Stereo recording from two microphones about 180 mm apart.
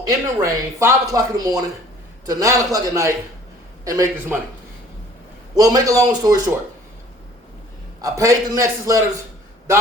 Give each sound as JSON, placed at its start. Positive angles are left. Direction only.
{"t": 0.1, "sound": "a man's voice", "side_deg": -20}
{"t": 5.5, "sound": "speech", "side_deg": -20}
{"t": 8.0, "sound": "a man's voice", "side_deg": -20}